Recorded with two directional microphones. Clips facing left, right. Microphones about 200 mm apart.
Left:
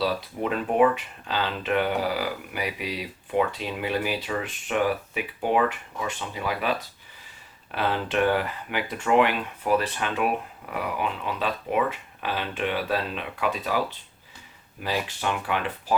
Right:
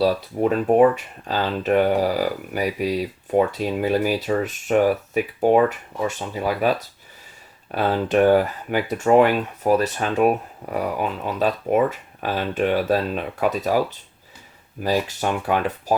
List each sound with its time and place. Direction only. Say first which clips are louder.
0.0 s speech: right 7 dB; 40° right (ahead or behind)